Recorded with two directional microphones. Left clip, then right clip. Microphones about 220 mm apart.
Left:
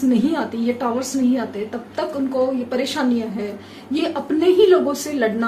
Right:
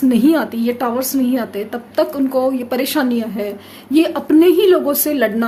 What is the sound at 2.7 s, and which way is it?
A woman's voice, 50° right (ahead or behind).